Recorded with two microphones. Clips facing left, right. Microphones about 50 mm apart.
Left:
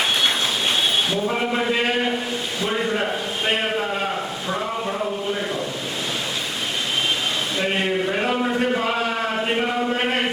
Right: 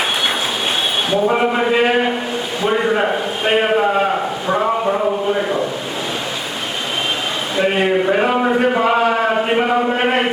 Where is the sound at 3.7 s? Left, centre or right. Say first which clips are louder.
Right 8 dB; right.